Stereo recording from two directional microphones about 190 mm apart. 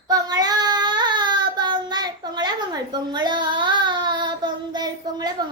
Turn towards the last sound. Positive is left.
turn(degrees=-20)  # may be behind; listen again after turning